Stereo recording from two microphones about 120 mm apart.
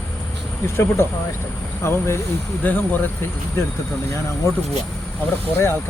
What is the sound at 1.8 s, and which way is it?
Speech, 20° left (ahead or behind).